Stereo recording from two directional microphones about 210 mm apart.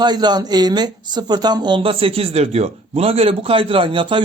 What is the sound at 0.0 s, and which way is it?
Speech, 20° right (ahead or behind).